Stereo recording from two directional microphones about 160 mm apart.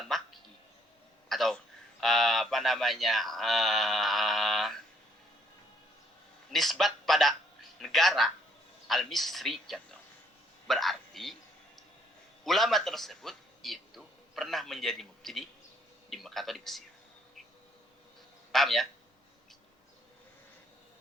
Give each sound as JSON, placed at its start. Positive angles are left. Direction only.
{"t": 0.1, "sound": "music", "side_deg": 0}
{"t": 1.3, "sound": "throat clearing", "side_deg": 0}
{"t": 2.0, "sound": "speech", "side_deg": 0}
{"t": 6.5, "sound": "a man's voice", "side_deg": 0}
{"t": 12.5, "sound": "a man's voice", "side_deg": 0}
{"t": 18.5, "sound": "speech", "side_deg": 0}